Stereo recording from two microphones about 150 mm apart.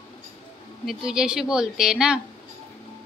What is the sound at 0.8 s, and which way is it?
A woman's voice, 5° right (ahead or behind).